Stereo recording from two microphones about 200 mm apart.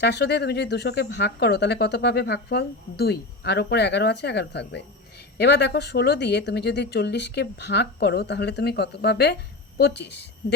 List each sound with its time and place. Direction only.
0.0 s speech: 55° left (ahead or behind)